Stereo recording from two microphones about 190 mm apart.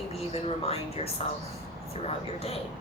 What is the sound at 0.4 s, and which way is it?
Speech, 30° left (ahead or behind).